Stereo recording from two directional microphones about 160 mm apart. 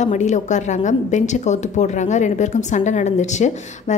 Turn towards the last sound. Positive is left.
turn(degrees=45)  # may be behind; listen again after turning